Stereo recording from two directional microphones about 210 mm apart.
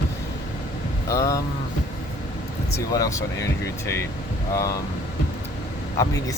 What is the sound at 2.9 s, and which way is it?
Speech, 15° left (ahead or behind).